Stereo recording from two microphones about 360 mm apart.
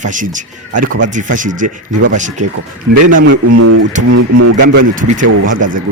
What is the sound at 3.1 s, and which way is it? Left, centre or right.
Speech, right.